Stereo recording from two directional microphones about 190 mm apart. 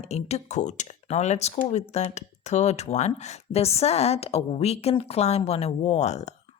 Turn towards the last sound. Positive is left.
turn(degrees=35)  # may be behind; listen again after turning